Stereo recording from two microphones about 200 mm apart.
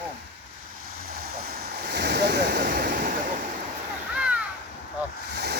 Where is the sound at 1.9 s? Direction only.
55° right (ahead or behind).